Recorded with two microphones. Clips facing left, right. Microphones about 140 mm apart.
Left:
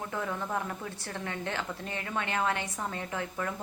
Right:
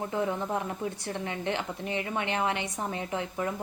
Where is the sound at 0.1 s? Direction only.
20° right (ahead or behind).